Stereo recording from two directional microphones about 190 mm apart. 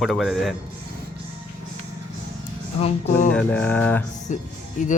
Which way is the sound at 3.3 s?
5° left (ahead or behind).